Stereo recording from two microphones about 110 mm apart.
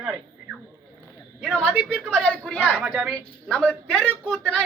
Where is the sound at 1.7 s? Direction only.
5° left (ahead or behind).